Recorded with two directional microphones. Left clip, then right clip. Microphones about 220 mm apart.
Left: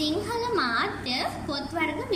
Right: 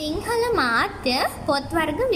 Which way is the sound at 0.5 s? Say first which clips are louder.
Right 5 dB; 35° right (ahead or behind).